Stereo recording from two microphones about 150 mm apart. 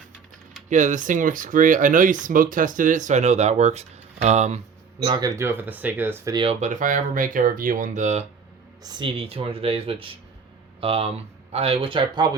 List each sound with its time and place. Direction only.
0.7 s speech: 55° right (ahead or behind)
5.0 s speech: 30° right (ahead or behind)
6.3 s speech: 35° right (ahead or behind)
6.6 s speech: 60° right (ahead or behind)
8.8 s speech: 30° right (ahead or behind)